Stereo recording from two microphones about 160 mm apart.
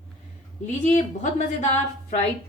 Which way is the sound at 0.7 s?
50° left (ahead or behind).